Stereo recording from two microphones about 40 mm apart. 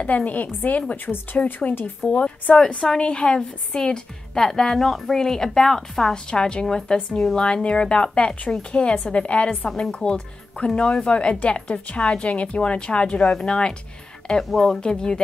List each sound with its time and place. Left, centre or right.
0.0 s a woman's voice: left
2.0 s a woman's voice: centre
8.9 s a woman's voice: left
14.5 s a woman's voice: centre
14.8 s a woman's voice: left